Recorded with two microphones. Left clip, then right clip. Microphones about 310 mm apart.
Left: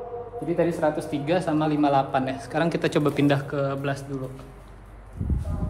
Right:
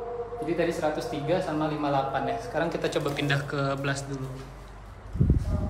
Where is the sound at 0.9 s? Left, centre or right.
Left; by 4.2 s centre.